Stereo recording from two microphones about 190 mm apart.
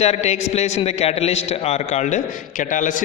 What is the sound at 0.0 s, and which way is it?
A man's voice, 35° left (ahead or behind).